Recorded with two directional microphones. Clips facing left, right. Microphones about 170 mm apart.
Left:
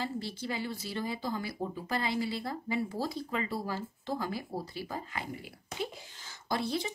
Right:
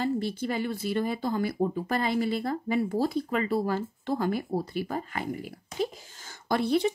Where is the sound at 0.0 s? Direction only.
55° right (ahead or behind).